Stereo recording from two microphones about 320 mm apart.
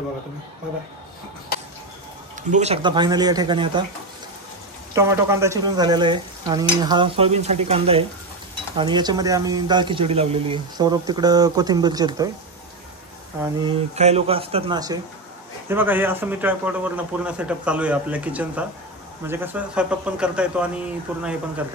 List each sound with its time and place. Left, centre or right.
2.5 s speech: centre
4.9 s speech: centre
13.4 s a man's voice: centre